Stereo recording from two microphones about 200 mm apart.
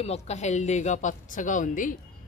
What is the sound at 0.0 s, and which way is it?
Speech, 30° left (ahead or behind).